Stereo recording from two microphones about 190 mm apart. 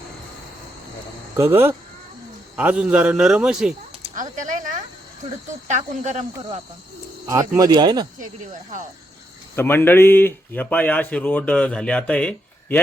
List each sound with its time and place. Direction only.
1.4 s speech: 10° right (ahead or behind)
4.1 s a sound: 45° right (ahead or behind)
5.6 s speech: 40° right (ahead or behind)
7.3 s speech: 15° right (ahead or behind)
9.6 s speech: 10° left (ahead or behind)